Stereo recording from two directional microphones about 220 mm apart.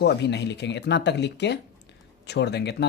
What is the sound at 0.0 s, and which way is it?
Speech, 50° left (ahead or behind).